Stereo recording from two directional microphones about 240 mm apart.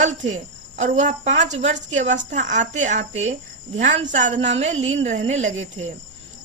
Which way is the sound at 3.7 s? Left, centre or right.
Right.